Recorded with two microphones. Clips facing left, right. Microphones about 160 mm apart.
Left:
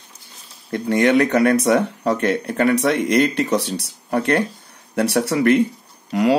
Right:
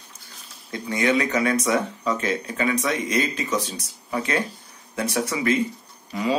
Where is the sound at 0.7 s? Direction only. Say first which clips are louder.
Left 6 dB; 60° left (ahead or behind).